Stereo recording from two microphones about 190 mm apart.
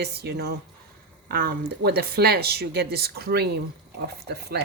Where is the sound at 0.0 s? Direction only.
55° right (ahead or behind).